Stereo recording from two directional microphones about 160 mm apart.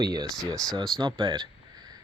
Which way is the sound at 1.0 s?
30° right (ahead or behind).